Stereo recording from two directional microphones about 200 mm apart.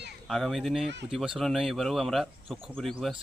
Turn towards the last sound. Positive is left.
turn(degrees=0)  # may be behind; listen again after turning